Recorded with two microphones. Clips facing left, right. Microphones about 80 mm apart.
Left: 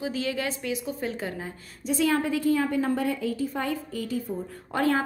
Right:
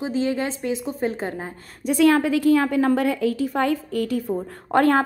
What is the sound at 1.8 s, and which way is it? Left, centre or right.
A woman's voice, right.